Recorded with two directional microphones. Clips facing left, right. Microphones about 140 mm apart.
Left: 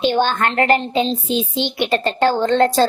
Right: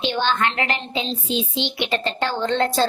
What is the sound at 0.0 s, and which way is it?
Speech, 45° left (ahead or behind).